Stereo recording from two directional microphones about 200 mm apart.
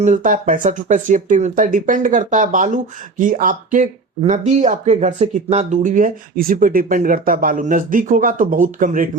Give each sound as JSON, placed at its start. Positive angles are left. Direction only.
{"t": 0.0, "sound": "speech", "side_deg": -40}